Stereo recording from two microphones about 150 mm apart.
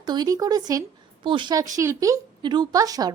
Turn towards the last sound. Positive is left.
turn(degrees=-25)  # may be behind; listen again after turning